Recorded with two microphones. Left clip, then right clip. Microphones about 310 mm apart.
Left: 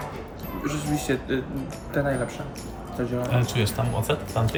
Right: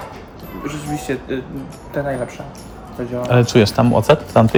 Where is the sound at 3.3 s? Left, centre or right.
Centre.